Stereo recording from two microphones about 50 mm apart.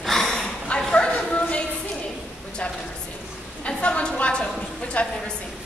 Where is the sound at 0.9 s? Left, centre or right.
Left.